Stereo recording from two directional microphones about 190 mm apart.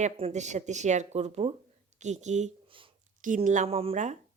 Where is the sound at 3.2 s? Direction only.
45° right (ahead or behind).